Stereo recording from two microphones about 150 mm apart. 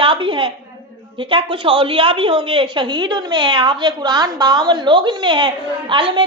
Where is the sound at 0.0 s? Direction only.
35° right (ahead or behind).